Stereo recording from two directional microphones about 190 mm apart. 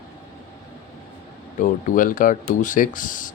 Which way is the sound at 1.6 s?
45° left (ahead or behind).